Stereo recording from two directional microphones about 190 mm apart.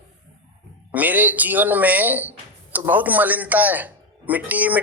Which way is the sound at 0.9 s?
10° right (ahead or behind).